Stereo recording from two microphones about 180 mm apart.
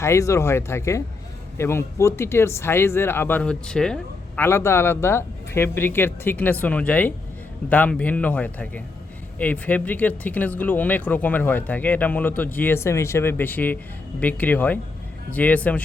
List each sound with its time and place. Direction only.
0.0 s speech: 15° left (ahead or behind)